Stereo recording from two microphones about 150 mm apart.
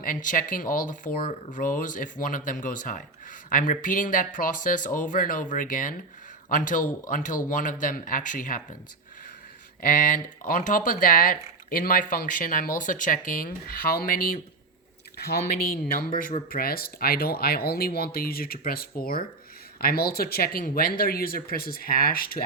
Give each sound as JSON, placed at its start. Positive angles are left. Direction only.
{"t": 0.0, "sound": "speech", "side_deg": 60}
{"t": 9.8, "sound": "speech", "side_deg": 65}
{"t": 15.2, "sound": "speech", "side_deg": 90}
{"t": 15.9, "sound": "speech", "side_deg": 75}
{"t": 19.8, "sound": "speech", "side_deg": 90}